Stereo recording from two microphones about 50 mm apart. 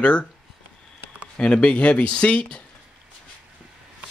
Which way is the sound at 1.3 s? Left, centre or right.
Left.